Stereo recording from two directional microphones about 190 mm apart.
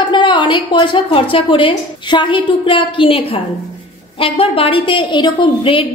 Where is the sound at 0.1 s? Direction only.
25° left (ahead or behind).